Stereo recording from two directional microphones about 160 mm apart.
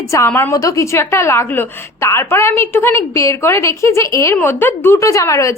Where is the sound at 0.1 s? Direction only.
15° left (ahead or behind).